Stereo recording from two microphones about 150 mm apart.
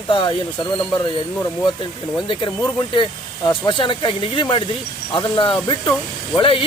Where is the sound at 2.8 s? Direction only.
30° left (ahead or behind).